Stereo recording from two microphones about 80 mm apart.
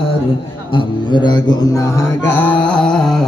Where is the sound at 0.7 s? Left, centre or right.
Left.